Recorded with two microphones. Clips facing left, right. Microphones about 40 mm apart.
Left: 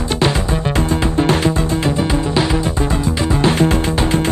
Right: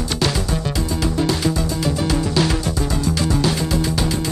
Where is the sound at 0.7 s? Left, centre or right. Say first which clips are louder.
Left 7 dB; left.